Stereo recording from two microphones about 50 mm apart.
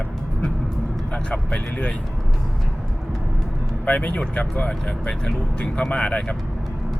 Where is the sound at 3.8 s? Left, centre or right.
Left.